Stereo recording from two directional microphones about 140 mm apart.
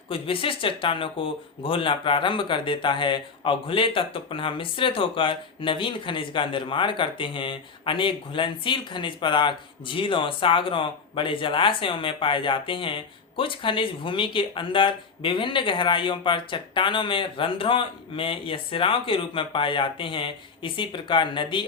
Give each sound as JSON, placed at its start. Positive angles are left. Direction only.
{"t": 0.1, "sound": "speech", "side_deg": 40}